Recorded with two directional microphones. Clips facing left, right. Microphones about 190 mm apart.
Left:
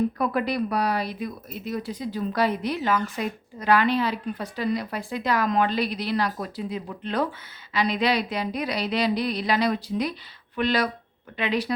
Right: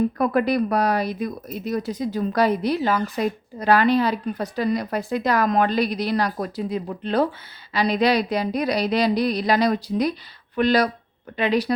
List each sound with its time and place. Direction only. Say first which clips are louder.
0.2 s speech: right 5 dB; 45° right (ahead or behind)